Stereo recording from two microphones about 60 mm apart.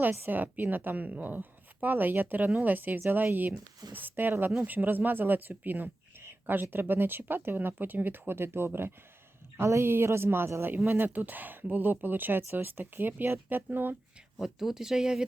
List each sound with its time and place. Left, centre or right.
0.1 s speech: right
0.3 s speech: right
14.3 s speech: centre